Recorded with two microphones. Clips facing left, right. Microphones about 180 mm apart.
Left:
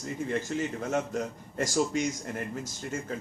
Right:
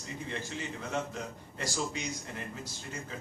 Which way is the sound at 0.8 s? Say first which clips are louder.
Left 6 dB; 45° left (ahead or behind).